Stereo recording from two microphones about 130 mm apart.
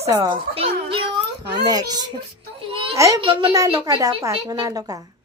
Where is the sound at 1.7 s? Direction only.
30° right (ahead or behind).